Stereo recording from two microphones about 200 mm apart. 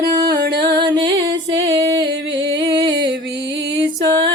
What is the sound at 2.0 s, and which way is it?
Music, 60° right (ahead or behind).